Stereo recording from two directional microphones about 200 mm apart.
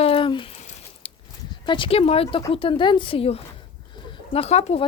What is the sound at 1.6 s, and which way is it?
Speech, 25° left (ahead or behind).